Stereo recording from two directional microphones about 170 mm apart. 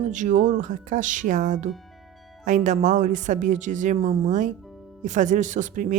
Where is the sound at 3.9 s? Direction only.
35° right (ahead or behind).